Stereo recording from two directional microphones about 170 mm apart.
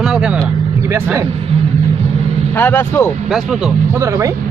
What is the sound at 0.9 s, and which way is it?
Speech, 15° right (ahead or behind).